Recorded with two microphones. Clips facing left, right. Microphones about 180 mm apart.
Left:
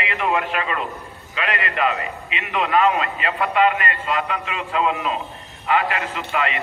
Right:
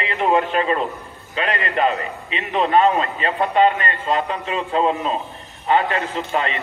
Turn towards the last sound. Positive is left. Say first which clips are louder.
# right 2 dB
turn(degrees=-35)  # may be behind; listen again after turning